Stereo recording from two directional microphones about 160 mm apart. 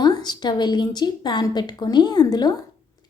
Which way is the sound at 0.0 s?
25° left (ahead or behind).